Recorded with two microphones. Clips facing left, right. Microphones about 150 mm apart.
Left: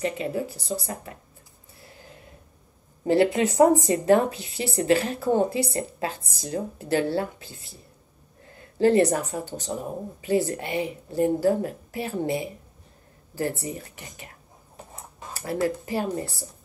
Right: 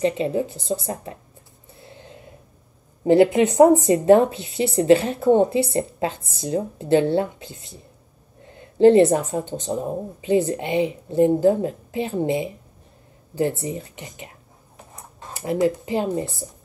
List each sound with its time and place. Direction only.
0.0 s speech: 25° right (ahead or behind)
1.8 s a sound: 25° right (ahead or behind)
3.1 s speech: 25° right (ahead or behind)
15.3 s speech: 20° right (ahead or behind)